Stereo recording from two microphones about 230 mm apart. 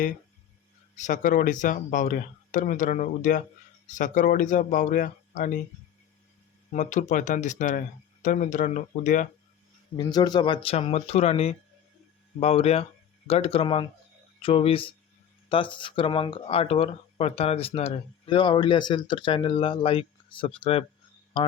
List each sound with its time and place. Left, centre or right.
0.9 s speech: left
6.7 s speech: left
10.0 s speech: centre